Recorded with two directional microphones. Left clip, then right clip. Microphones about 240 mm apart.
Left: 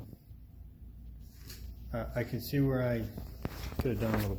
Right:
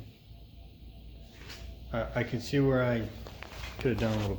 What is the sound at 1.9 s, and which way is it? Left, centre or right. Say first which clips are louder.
Speech: right 4 dB; centre.